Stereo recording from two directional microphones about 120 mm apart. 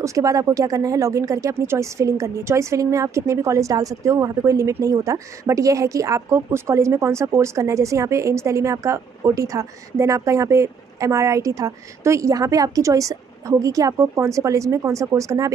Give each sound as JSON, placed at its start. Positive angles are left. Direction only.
{"t": 0.0, "sound": "speech", "side_deg": -25}